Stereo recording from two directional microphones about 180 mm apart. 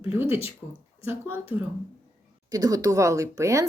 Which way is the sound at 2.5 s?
20° right (ahead or behind).